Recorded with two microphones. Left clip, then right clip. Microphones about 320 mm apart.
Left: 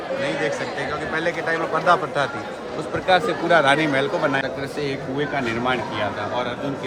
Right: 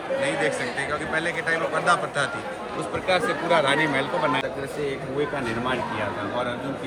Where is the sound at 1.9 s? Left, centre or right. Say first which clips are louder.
Left 5 dB; left.